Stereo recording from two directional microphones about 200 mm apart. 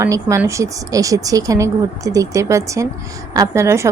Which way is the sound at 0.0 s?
15° right (ahead or behind).